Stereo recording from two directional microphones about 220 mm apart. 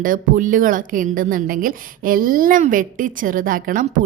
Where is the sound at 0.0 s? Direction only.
35° right (ahead or behind).